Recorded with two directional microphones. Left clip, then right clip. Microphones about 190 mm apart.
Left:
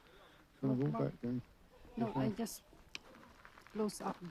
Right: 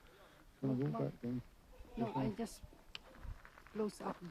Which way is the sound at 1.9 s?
35° left (ahead or behind).